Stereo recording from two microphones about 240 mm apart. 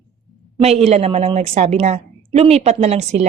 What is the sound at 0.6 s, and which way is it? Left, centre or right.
A woman's voice, right.